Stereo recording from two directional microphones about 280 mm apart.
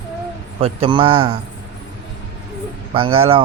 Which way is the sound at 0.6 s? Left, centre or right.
Centre.